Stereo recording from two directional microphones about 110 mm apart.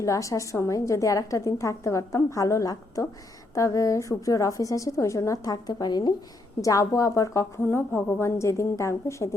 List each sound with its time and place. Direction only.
0.0 s a woman's voice: 30° left (ahead or behind)